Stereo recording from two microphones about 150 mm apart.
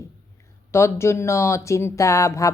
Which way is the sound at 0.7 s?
20° left (ahead or behind).